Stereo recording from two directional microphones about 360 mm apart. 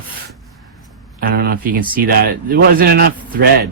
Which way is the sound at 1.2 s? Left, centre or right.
Right.